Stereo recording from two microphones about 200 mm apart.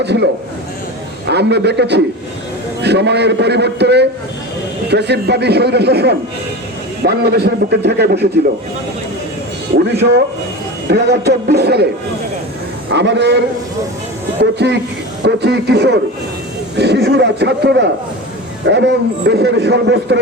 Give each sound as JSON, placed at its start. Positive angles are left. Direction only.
{"t": 0.0, "sound": "a man's voice", "side_deg": -55}
{"t": 1.3, "sound": "a man's voice", "side_deg": -55}
{"t": 9.7, "sound": "a man's voice", "side_deg": -55}
{"t": 12.9, "sound": "a man's voice", "side_deg": -60}
{"t": 14.6, "sound": "a man's voice", "side_deg": -55}